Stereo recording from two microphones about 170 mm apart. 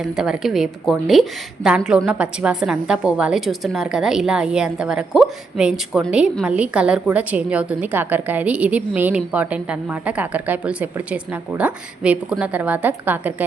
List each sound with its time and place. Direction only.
0.0 s a woman's voice: 5° right (ahead or behind)